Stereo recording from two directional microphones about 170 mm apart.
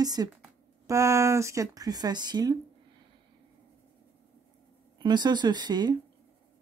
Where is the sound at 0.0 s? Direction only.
25° right (ahead or behind).